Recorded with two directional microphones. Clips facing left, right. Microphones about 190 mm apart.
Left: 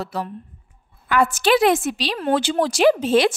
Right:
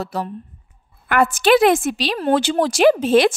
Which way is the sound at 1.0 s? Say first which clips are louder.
Right 2 dB; 55° right (ahead or behind).